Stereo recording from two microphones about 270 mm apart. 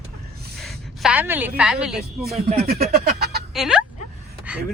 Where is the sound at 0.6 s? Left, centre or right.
Centre.